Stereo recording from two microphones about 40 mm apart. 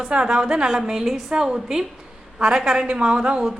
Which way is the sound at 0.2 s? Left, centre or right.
Centre.